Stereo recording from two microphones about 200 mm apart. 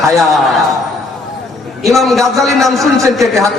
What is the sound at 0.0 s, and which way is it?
Speech, centre (ahead or behind).